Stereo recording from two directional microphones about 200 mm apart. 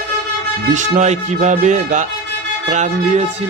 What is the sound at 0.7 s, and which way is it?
Speech, 35° right (ahead or behind).